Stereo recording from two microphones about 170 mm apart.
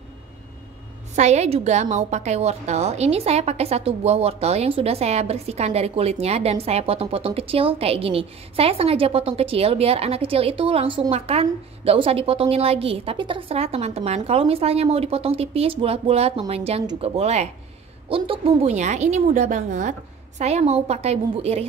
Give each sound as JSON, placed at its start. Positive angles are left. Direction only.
{"t": 1.1, "sound": "a woman's voice", "side_deg": -40}